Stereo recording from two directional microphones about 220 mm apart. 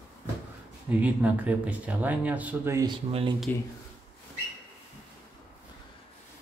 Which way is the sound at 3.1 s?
25° right (ahead or behind).